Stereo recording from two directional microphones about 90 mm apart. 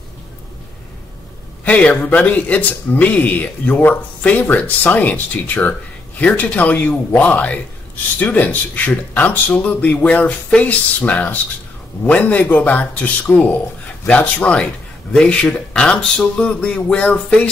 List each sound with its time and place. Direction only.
1.6 s speech: 15° left (ahead or behind)